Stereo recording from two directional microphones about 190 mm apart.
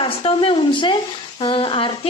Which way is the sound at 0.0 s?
25° left (ahead or behind).